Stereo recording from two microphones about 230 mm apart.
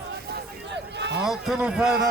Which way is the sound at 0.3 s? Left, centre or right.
Right.